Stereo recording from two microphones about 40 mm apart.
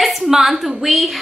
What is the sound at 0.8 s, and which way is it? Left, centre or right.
Speech, centre.